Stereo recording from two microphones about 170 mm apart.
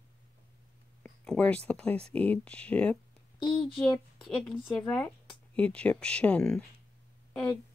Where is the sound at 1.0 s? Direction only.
5° left (ahead or behind).